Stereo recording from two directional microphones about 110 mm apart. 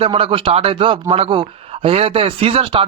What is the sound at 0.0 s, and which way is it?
Speech, 55° right (ahead or behind).